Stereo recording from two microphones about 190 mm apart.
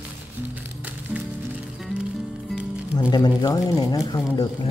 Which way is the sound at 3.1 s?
20° left (ahead or behind).